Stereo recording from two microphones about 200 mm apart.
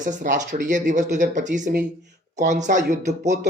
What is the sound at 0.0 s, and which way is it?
Speech, 40° right (ahead or behind).